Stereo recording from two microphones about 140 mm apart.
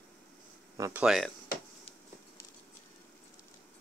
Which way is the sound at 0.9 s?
5° right (ahead or behind).